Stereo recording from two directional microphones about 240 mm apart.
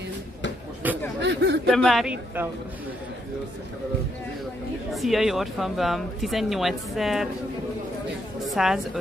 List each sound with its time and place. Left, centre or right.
0.8 s speech: centre
1.2 s speech: right
1.7 s speech: centre
4.9 s speech: centre
8.5 s speech: centre